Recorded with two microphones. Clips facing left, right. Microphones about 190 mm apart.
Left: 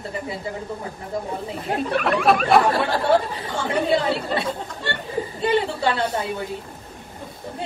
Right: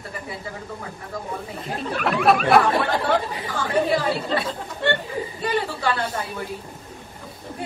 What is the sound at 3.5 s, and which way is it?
Speech, 25° left (ahead or behind).